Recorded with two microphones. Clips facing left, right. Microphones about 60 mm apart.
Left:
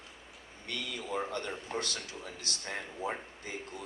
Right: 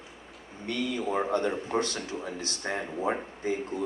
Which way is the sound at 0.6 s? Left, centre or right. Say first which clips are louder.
Right 9 dB; right.